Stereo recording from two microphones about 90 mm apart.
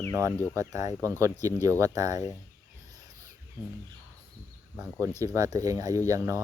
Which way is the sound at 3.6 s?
55° left (ahead or behind).